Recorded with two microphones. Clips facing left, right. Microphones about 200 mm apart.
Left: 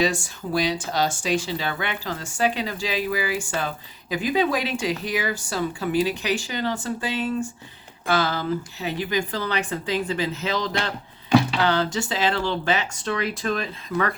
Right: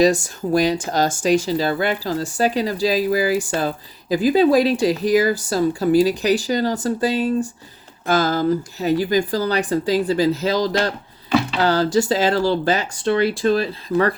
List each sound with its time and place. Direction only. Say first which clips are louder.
0.0 s speech: right 8 dB; 40° right (ahead or behind)